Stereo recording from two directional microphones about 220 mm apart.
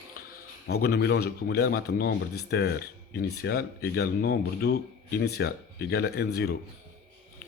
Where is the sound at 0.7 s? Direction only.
45° left (ahead or behind).